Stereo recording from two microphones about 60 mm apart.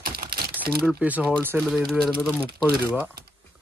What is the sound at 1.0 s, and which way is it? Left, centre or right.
Speech, right.